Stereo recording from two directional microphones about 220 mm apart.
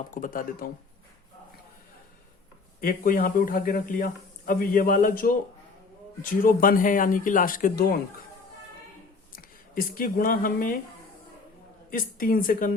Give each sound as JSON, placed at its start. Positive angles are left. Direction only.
{"t": 0.1, "sound": "speech", "side_deg": 40}
{"t": 2.8, "sound": "speech", "side_deg": 40}
{"t": 9.3, "sound": "speech", "side_deg": 40}
{"t": 11.9, "sound": "speech", "side_deg": 40}